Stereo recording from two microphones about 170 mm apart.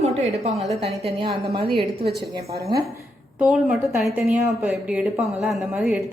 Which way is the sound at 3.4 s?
5° right (ahead or behind).